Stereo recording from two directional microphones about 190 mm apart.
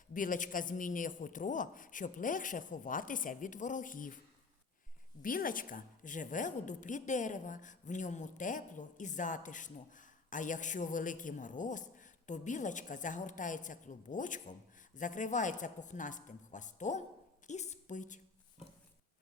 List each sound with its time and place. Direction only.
0.1 s a man's voice: 45° left (ahead or behind)
5.2 s a woman's voice: 45° left (ahead or behind)